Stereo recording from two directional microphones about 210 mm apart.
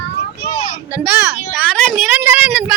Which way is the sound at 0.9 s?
5° right (ahead or behind).